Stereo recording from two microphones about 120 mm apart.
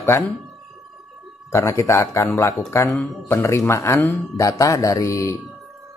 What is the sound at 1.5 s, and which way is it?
Speech, 25° left (ahead or behind).